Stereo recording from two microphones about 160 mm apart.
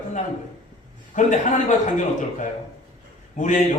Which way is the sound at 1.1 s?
50° left (ahead or behind).